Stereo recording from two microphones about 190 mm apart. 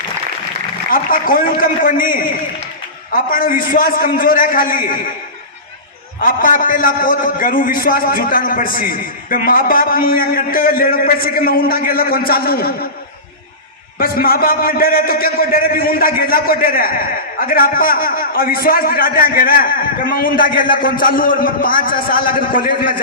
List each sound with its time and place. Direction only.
0.9 s a man's voice: 50° left (ahead or behind)
6.1 s a man's voice: 45° left (ahead or behind)
14.0 s a man's voice: 50° left (ahead or behind)